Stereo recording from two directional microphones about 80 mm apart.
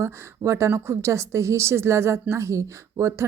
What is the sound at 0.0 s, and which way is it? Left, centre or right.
Speech, right.